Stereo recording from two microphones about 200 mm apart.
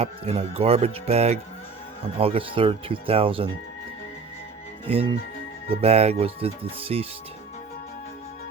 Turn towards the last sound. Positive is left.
turn(degrees=-30)  # may be behind; listen again after turning